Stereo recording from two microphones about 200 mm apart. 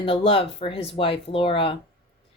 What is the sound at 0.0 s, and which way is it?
Speech, 25° left (ahead or behind).